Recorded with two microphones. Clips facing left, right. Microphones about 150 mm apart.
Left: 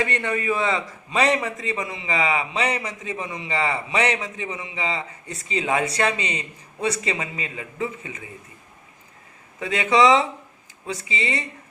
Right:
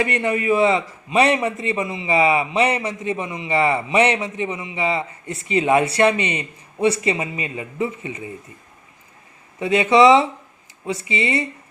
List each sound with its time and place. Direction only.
0.5 s a man's voice: 30° right (ahead or behind)
9.6 s speech: 30° right (ahead or behind)